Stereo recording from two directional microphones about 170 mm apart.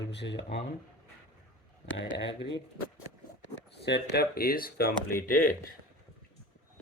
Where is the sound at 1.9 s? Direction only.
90° left; by 5.6 s 55° left (ahead or behind).